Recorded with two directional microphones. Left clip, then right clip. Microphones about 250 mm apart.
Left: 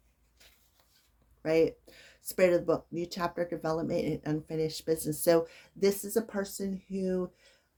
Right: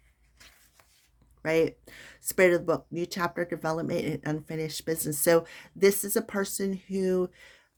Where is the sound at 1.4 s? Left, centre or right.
Right.